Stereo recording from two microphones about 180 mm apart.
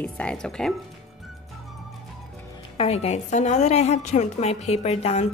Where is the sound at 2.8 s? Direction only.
35° left (ahead or behind).